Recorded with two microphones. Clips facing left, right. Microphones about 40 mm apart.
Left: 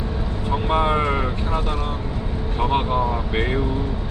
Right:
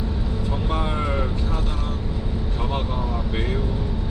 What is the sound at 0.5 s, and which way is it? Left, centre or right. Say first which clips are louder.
Vehicle: left 8 dB; left.